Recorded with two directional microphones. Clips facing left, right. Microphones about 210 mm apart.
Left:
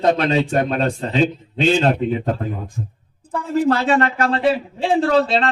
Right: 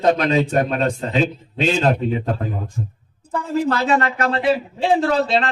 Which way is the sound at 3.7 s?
35° left (ahead or behind).